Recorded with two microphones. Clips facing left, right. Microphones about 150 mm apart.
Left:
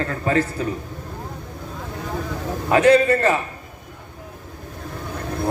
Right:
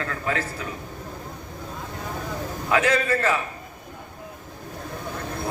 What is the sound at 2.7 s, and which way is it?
Speech, 35° left (ahead or behind).